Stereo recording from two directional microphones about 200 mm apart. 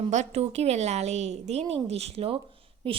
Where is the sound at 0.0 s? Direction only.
35° right (ahead or behind).